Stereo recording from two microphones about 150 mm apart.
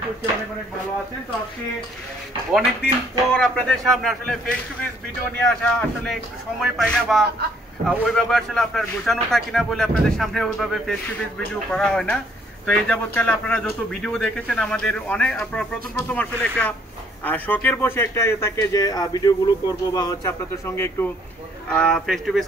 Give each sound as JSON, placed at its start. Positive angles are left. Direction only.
{"t": 3.3, "sound": "a man's voice", "side_deg": 5}